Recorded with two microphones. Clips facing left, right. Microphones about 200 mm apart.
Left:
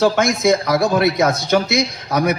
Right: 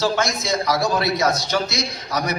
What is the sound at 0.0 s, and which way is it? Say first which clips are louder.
A man's voice: left 7 dB; 55° left (ahead or behind).